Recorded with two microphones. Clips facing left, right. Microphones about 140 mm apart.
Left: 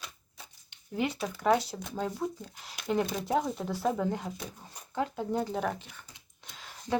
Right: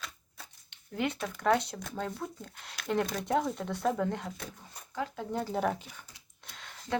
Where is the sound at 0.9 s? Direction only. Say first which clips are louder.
Left 1 dB; 5° left (ahead or behind).